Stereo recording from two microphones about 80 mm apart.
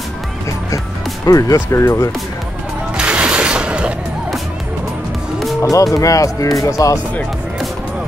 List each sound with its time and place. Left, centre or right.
1.2 s speech: left
3.0 s mechanisms: centre
5.6 s speech: left